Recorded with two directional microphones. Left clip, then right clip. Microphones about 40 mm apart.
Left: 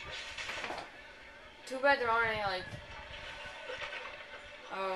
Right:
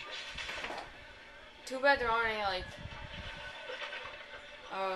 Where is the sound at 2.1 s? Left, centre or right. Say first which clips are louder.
Left 1 dB; right.